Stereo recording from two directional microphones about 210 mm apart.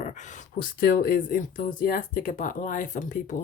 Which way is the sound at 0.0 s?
35° left (ahead or behind).